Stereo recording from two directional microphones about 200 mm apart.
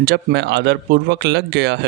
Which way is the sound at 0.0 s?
55° right (ahead or behind).